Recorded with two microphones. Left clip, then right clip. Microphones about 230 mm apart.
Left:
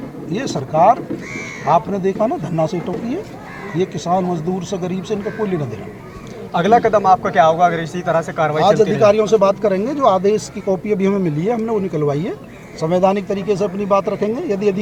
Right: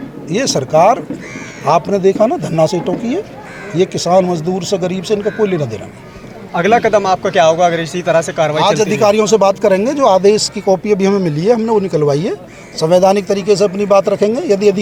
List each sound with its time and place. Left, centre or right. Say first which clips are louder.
0.3 s speech: right 8 dB; right
6.5 s a man's voice: right 2 dB; right
6.7 s a man's voice: left 1 dB; right